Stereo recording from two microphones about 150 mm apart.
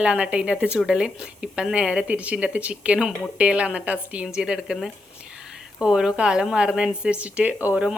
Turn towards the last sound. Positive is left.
turn(degrees=-10)  # may be behind; listen again after turning